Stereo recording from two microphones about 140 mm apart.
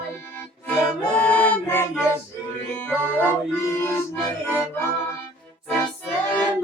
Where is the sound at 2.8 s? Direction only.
15° left (ahead or behind).